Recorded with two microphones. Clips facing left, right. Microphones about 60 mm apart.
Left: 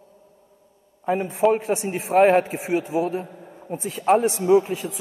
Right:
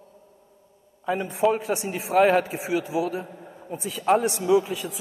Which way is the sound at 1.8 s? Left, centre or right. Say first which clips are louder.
Left 3 dB; left.